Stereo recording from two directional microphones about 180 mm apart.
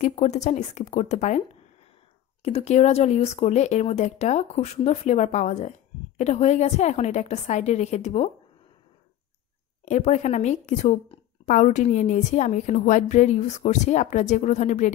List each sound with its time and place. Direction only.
0.0 s speech: 40° left (ahead or behind)
2.4 s speech: 35° left (ahead or behind)
9.8 s speech: 40° left (ahead or behind)